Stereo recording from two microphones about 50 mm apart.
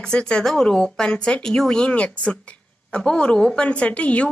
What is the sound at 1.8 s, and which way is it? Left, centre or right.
A woman's voice, left.